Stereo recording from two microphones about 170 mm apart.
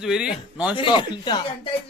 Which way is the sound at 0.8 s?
30° left (ahead or behind).